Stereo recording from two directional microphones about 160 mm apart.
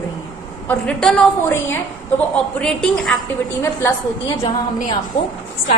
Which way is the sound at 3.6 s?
15° left (ahead or behind).